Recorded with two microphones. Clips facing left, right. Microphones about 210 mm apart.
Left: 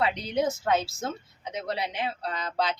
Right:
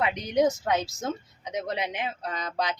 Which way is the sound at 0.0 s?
15° right (ahead or behind).